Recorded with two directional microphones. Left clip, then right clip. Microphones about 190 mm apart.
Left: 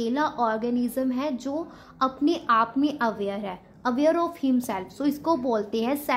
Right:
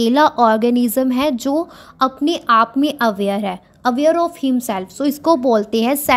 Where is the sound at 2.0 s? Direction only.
35° right (ahead or behind).